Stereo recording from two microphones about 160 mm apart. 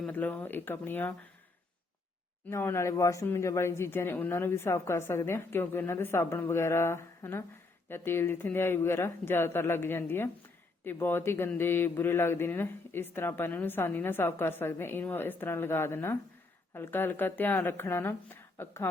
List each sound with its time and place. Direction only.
0.0 s a man's voice: 10° left (ahead or behind)
2.5 s a man's voice: 15° left (ahead or behind)